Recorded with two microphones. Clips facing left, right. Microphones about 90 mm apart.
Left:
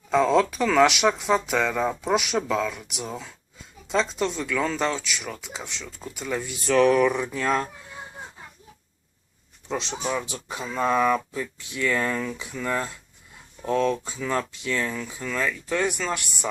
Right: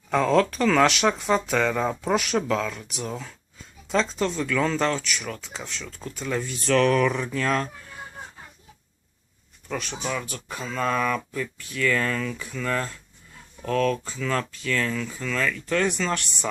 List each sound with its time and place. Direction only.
0.1 s speech: 15° left (ahead or behind)
9.6 s speech: 20° left (ahead or behind)